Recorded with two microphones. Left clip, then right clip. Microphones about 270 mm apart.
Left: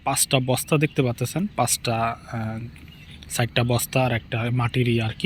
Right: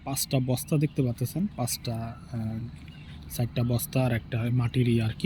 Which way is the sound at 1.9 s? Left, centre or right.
Centre.